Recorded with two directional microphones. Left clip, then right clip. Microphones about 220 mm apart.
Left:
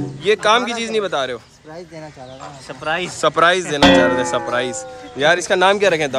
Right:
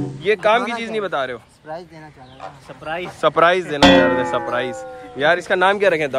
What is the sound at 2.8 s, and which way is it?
Speech, 50° left (ahead or behind).